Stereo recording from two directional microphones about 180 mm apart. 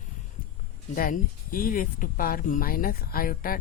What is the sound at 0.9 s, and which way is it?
Speech, 50° left (ahead or behind).